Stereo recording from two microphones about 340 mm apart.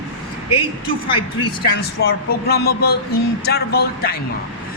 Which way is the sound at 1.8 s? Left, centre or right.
Left.